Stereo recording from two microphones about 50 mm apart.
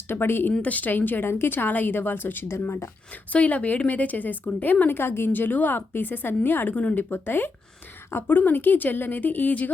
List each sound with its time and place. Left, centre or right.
0.1 s a woman's voice: left
0.6 s a woman's voice: left
3.3 s speech: left
6.7 s speech: left
7.1 s a woman's voice: left